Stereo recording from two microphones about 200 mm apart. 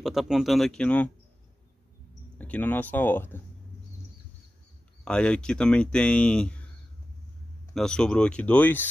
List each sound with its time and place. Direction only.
0.0 s speech: centre (ahead or behind)
2.3 s speech: 5° left (ahead or behind)
5.0 s speech: 5° left (ahead or behind)
7.7 s speech: 5° left (ahead or behind)